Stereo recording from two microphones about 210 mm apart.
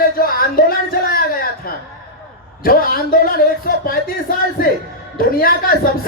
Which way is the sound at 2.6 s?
45° left (ahead or behind).